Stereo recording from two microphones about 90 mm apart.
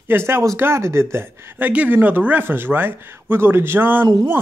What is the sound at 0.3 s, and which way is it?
Speech, 30° right (ahead or behind).